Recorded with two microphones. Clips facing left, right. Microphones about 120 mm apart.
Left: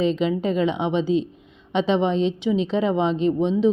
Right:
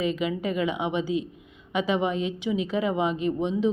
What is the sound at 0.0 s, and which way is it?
Speech, 25° left (ahead or behind).